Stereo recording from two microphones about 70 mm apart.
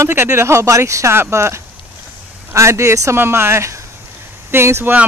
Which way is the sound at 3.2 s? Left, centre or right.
Right.